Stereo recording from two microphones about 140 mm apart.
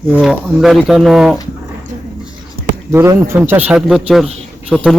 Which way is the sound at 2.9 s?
15° right (ahead or behind).